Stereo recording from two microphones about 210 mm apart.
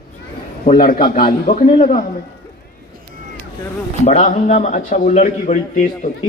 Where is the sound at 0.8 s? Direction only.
45° left (ahead or behind).